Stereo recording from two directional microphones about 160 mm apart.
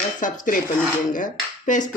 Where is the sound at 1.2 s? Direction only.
50° left (ahead or behind).